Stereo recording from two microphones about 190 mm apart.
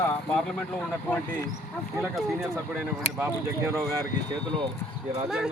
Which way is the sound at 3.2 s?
15° right (ahead or behind).